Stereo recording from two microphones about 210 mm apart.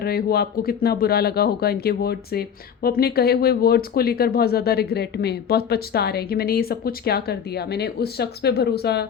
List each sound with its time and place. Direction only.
0.0 s speech: 50° left (ahead or behind)